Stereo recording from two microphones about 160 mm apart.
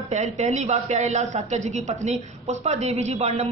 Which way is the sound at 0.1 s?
45° right (ahead or behind).